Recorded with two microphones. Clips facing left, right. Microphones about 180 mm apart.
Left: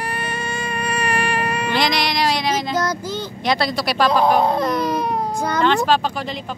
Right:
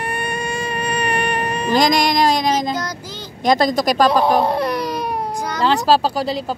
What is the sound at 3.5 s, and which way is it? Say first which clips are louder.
Speech: right 5 dB; 45° right (ahead or behind).